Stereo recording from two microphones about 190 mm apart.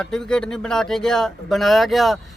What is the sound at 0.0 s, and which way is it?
Speech, 5° left (ahead or behind).